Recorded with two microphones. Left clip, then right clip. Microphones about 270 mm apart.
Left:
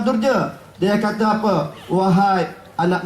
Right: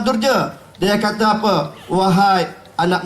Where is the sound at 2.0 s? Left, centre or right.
Centre.